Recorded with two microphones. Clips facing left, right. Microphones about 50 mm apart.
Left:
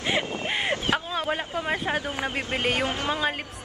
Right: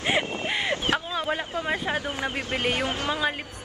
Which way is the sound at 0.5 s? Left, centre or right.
Left.